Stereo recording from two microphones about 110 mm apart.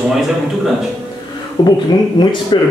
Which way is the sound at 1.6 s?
40° left (ahead or behind).